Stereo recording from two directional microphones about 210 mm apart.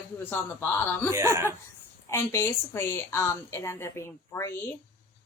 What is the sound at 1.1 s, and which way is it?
Speech, 15° right (ahead or behind).